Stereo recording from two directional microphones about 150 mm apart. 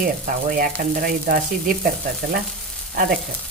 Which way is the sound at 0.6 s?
70° right (ahead or behind).